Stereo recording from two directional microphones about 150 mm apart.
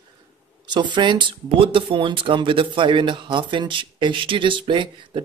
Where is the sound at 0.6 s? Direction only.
30° right (ahead or behind).